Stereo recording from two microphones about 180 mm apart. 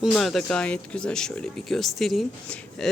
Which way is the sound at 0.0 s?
Centre (ahead or behind).